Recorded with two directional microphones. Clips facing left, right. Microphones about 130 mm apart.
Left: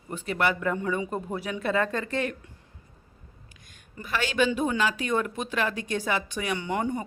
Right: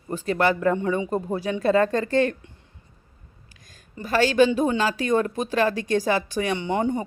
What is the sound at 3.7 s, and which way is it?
Speech, 35° right (ahead or behind).